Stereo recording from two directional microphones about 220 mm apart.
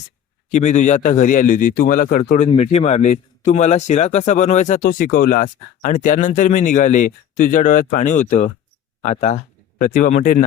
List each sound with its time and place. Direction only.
0.5 s speech: 35° left (ahead or behind)